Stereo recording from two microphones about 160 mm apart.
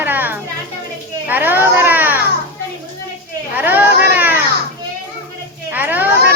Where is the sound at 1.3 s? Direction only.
10° right (ahead or behind).